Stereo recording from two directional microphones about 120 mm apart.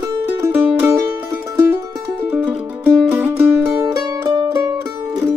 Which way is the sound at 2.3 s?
15° right (ahead or behind).